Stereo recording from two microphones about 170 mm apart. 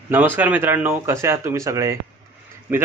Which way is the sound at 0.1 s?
10° right (ahead or behind).